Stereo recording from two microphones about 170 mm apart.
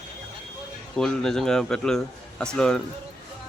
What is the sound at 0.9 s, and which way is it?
Speech, 5° left (ahead or behind).